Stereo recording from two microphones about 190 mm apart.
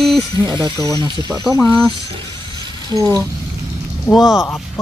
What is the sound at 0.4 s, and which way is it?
Speech, 20° right (ahead or behind).